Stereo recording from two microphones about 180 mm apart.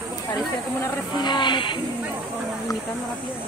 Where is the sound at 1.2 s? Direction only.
25° left (ahead or behind).